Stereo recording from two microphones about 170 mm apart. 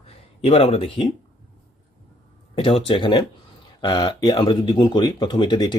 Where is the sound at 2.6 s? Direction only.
35° left (ahead or behind).